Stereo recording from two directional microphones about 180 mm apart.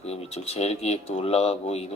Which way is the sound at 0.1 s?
35° left (ahead or behind).